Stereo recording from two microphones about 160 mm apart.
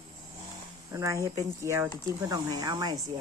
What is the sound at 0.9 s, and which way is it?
Speech, 20° right (ahead or behind).